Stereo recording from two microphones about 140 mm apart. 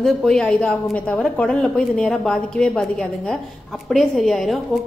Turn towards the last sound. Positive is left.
turn(degrees=0)  # may be behind; listen again after turning